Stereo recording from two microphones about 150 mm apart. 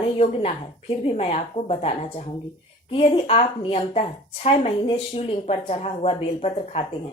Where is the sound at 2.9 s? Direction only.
45° left (ahead or behind).